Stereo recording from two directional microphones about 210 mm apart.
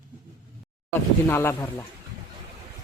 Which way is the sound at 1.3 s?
10° left (ahead or behind).